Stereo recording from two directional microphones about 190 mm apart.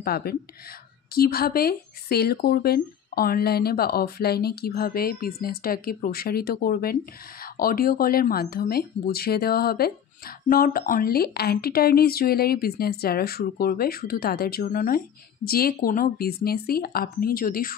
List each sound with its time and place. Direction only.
0.0 s speech: 55° left (ahead or behind)